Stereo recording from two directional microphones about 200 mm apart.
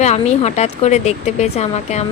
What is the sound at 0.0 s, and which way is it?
Speech, 35° left (ahead or behind).